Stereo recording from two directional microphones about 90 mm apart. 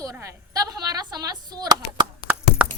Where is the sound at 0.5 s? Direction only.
40° right (ahead or behind).